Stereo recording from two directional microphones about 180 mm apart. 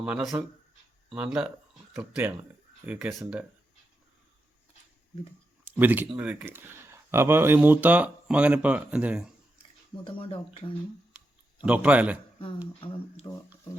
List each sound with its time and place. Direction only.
0.0 s speech: 5° right (ahead or behind)
5.6 s speech: 10° right (ahead or behind)
10.0 s speech: 30° left (ahead or behind)
11.1 s a sound: 5° right (ahead or behind)
13.2 s speech: 20° left (ahead or behind)